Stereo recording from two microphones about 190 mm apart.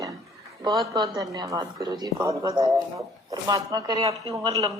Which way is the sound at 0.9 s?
20° right (ahead or behind).